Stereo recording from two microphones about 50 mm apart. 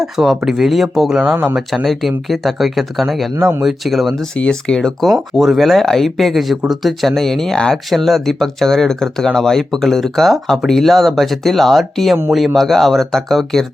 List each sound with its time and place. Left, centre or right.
0.0 s speech: centre
1.1 s speech: centre
1.7 s speech: centre
4.4 s speech: centre
5.0 s speech: centre
7.9 s speech: centre